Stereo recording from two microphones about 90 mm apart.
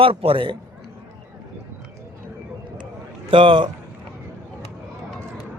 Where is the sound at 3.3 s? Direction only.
65° right (ahead or behind).